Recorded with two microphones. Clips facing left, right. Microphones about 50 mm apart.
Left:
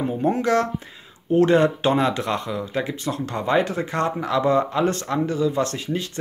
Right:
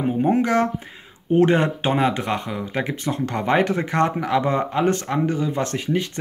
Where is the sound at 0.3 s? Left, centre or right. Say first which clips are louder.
Right 1 dB; right.